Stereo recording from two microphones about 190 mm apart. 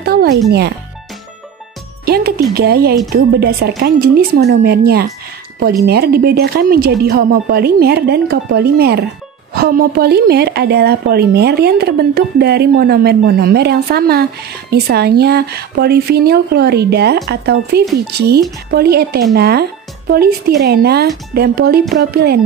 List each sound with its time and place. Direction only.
0.0 s music: 55° right (ahead or behind)
0.5 s a woman's voice: 60° right (ahead or behind)
2.0 s a woman's voice: 55° right (ahead or behind)